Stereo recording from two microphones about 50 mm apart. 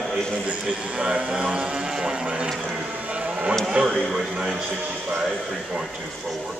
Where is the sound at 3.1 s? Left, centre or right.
Right.